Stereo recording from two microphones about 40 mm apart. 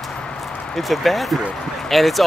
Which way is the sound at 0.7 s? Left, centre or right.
Centre.